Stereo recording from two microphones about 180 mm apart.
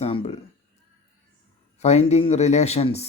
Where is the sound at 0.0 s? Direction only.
35° left (ahead or behind).